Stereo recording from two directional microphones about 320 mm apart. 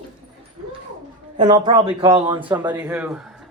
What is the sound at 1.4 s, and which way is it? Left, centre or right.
Speech, centre.